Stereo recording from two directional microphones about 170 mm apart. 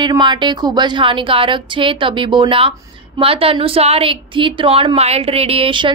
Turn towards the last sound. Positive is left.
turn(degrees=-30)  # may be behind; listen again after turning